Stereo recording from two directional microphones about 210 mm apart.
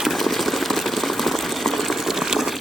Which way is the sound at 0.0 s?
Centre (ahead or behind).